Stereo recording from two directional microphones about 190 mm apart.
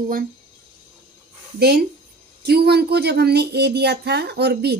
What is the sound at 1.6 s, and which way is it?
Speech, 55° right (ahead or behind).